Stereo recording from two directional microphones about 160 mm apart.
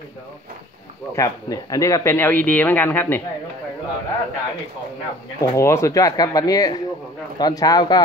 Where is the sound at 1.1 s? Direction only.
20° left (ahead or behind).